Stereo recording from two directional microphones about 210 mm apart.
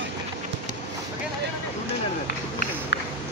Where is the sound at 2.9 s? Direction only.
55° left (ahead or behind).